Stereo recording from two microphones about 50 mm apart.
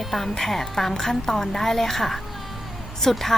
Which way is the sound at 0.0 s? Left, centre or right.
Centre.